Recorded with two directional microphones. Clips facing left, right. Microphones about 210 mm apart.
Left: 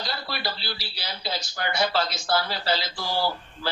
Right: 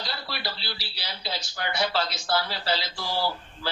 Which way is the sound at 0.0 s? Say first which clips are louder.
Left 3 dB; 45° left (ahead or behind).